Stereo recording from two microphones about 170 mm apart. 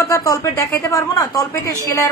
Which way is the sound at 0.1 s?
20° left (ahead or behind).